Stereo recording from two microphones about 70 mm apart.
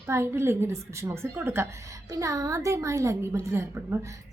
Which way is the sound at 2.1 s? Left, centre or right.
Right.